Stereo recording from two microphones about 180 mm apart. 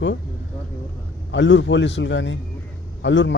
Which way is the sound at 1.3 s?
90° left.